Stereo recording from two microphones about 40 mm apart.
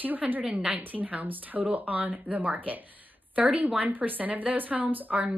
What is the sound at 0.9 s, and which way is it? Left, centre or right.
A woman's voice, right.